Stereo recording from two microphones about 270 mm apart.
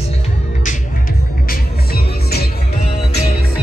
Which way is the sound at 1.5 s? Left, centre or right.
Left.